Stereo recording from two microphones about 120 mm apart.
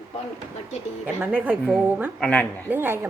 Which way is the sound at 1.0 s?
15° right (ahead or behind).